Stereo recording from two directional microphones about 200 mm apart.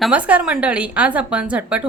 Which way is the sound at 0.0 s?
5° right (ahead or behind).